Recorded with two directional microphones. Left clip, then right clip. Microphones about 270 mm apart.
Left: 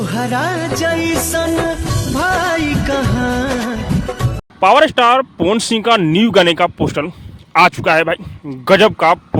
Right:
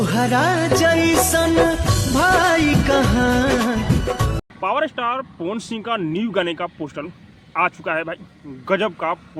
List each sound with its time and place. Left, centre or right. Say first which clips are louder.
0.0 s music: even; centre
4.6 s speech: left 12 dB; left